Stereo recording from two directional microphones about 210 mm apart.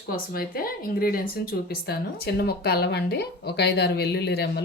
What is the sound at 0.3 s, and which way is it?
Speech, 45° left (ahead or behind).